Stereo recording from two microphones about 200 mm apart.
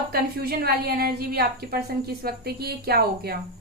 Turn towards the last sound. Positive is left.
turn(degrees=-50)  # may be behind; listen again after turning